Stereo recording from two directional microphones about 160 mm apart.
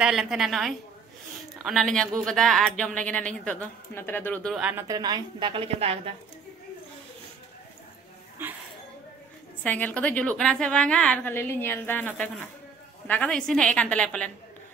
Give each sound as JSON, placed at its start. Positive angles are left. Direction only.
{"t": 0.0, "sound": "a woman's voice", "side_deg": -5}
{"t": 4.6, "sound": "speech", "side_deg": -10}
{"t": 4.8, "sound": "a woman's voice", "side_deg": -25}
{"t": 8.4, "sound": "a sound", "side_deg": -15}
{"t": 9.6, "sound": "a woman's voice", "side_deg": 10}